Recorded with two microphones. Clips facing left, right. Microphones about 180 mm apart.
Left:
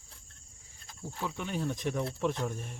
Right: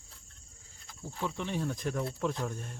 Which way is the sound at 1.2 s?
Centre (ahead or behind).